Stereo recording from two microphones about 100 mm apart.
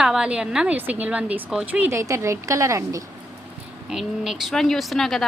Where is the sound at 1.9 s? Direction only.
30° right (ahead or behind).